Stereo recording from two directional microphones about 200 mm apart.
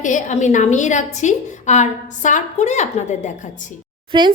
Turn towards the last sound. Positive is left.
turn(degrees=-25)  # may be behind; listen again after turning